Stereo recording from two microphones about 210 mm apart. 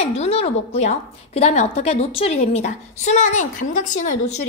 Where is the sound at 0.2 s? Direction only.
30° left (ahead or behind).